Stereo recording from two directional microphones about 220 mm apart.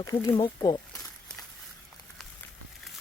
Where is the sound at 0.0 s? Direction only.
20° left (ahead or behind).